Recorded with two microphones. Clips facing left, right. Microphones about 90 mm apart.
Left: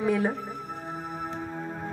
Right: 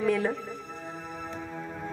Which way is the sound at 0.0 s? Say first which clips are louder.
Left 1 dB; 10° left (ahead or behind).